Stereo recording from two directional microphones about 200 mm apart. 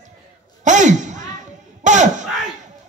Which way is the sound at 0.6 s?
35° right (ahead or behind).